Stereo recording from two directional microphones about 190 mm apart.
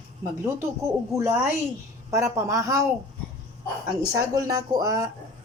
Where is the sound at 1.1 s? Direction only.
15° right (ahead or behind).